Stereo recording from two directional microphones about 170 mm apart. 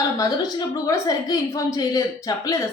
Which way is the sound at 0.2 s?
20° left (ahead or behind).